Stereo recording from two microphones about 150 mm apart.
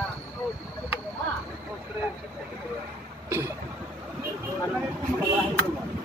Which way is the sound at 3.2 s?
20° right (ahead or behind).